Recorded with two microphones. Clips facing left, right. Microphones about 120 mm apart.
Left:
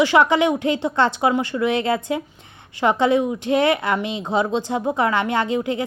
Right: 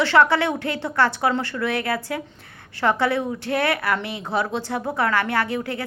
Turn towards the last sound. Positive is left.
turn(degrees=20)  # may be behind; listen again after turning